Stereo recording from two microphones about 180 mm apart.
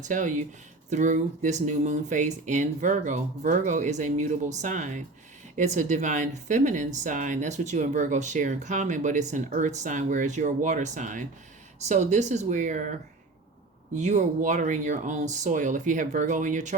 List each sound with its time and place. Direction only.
0.1 s a woman's voice: 45° right (ahead or behind)
13.9 s speech: 40° right (ahead or behind)